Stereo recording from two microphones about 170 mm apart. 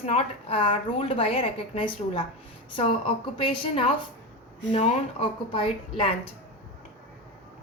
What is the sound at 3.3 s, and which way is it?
A woman's voice, 30° left (ahead or behind).